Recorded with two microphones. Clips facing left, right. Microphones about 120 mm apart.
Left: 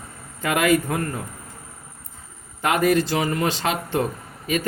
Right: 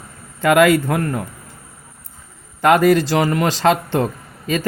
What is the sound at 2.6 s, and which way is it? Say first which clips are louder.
A man's voice: right 6 dB; 90° right.